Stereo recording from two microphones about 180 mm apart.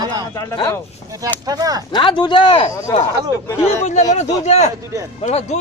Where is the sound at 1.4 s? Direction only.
20° right (ahead or behind).